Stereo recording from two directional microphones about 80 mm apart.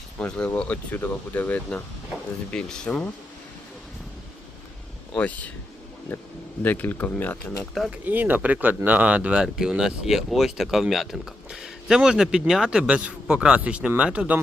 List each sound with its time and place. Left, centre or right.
0.2 s speech: centre
2.5 s speech: centre
5.1 s speech: centre
7.9 s speech: right